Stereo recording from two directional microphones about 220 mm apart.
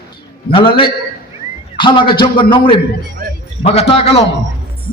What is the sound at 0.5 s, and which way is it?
A man's voice, 25° left (ahead or behind).